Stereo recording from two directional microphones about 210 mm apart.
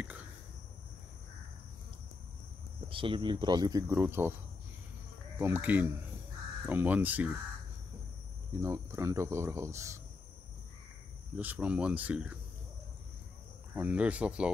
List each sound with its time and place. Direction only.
2.9 s speech: 25° right (ahead or behind)
5.4 s speech: 10° right (ahead or behind)
8.5 s speech: 15° right (ahead or behind)
11.3 s speech: 5° right (ahead or behind)
13.7 s speech: 5° right (ahead or behind)